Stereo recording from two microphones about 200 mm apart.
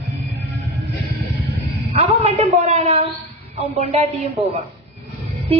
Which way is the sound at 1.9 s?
30° right (ahead or behind).